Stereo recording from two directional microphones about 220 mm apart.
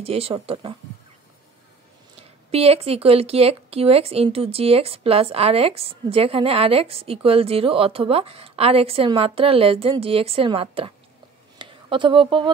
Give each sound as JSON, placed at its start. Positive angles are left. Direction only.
{"t": 0.0, "sound": "speech", "side_deg": -25}
{"t": 2.5, "sound": "speech", "side_deg": -25}